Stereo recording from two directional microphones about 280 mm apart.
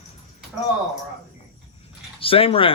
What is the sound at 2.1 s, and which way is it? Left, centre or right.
Speech, centre.